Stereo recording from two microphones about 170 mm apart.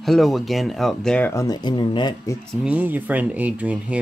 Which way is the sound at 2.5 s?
5° right (ahead or behind).